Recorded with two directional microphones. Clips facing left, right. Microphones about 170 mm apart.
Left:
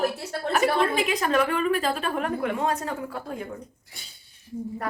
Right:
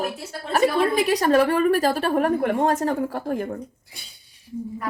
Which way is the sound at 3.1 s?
60° right (ahead or behind).